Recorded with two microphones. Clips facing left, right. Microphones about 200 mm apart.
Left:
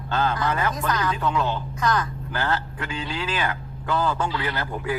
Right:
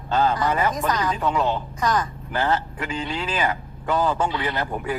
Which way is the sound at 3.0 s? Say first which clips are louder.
Right 2 dB; 15° right (ahead or behind).